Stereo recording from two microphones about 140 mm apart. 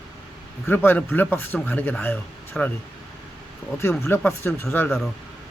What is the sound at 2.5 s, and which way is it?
Speech, 5° left (ahead or behind).